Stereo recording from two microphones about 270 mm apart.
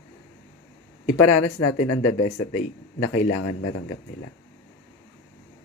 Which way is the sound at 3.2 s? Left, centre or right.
Left.